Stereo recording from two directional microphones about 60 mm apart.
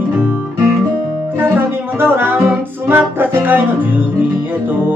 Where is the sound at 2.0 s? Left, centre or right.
Right.